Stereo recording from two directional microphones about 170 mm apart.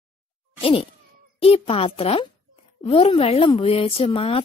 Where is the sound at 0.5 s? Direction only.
35° left (ahead or behind).